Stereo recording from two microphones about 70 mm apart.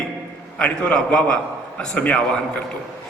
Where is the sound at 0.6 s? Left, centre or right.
Centre.